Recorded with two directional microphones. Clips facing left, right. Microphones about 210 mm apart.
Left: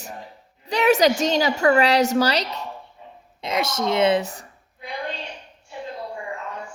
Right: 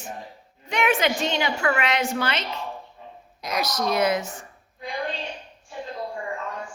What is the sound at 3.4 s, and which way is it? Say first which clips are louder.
A woman's voice: left 2 dB; 25° left (ahead or behind).